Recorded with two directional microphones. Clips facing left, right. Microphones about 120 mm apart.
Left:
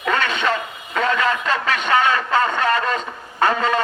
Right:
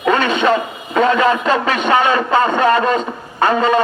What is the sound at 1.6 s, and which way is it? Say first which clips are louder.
A man's voice: right 1 dB; 15° right (ahead or behind).